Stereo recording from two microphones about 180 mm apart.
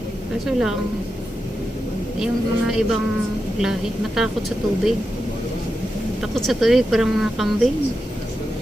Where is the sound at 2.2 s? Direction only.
5° right (ahead or behind).